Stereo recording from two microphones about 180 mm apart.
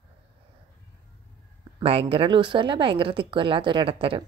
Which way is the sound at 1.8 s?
30° right (ahead or behind).